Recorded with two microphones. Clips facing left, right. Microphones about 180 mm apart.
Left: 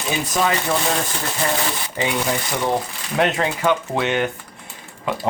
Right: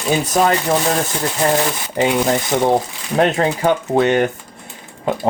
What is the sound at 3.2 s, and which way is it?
Speech, 35° right (ahead or behind).